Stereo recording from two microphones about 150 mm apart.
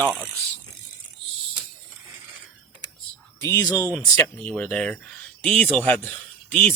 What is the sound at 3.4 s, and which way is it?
Speech, 20° left (ahead or behind).